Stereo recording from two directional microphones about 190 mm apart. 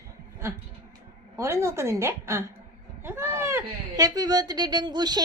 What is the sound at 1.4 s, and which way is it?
A woman's voice, 15° right (ahead or behind).